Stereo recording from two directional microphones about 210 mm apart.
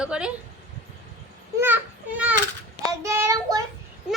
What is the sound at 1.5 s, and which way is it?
Children playing, 10° right (ahead or behind).